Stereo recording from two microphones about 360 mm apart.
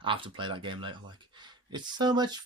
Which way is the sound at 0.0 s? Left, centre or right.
Centre.